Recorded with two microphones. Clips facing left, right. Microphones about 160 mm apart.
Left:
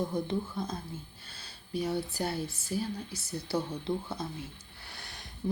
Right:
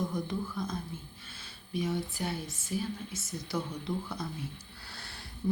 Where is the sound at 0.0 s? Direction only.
30° left (ahead or behind).